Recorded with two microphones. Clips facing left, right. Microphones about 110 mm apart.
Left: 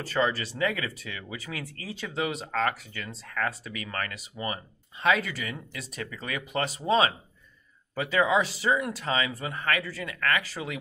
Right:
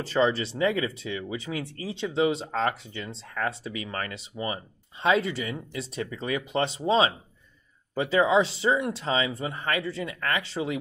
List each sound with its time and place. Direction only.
0.0 s speech: 25° right (ahead or behind)